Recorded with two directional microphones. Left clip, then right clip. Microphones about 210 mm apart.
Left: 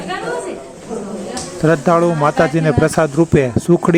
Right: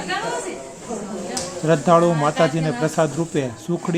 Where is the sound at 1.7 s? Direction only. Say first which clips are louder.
Left 2 dB; 30° left (ahead or behind).